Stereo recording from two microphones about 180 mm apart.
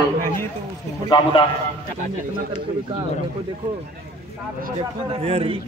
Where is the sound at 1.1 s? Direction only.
25° left (ahead or behind).